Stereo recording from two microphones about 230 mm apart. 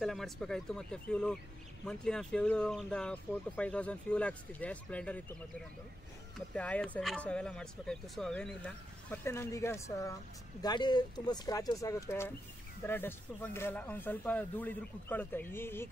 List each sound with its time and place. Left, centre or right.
0.0 s speech: centre
6.3 s speech: centre